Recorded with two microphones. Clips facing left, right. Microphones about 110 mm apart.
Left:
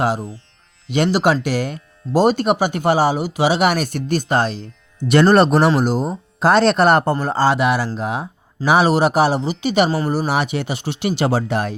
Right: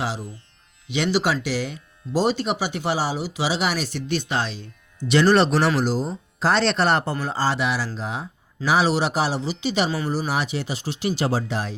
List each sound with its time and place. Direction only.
0.0 s a man's voice: 50° left (ahead or behind)